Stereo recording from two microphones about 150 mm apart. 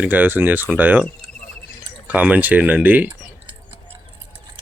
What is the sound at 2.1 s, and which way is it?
Speech, 10° right (ahead or behind).